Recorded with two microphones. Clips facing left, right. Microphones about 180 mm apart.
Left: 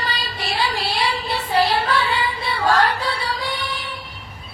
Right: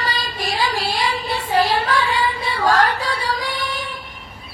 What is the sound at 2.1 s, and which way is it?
Music, 40° right (ahead or behind).